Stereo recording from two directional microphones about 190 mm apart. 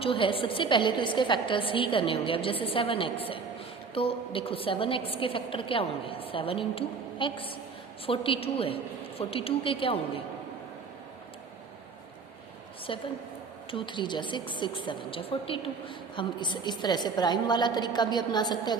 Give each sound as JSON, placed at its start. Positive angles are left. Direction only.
{"t": 0.0, "sound": "a woman's voice", "side_deg": 30}
{"t": 12.9, "sound": "a woman's voice", "side_deg": 25}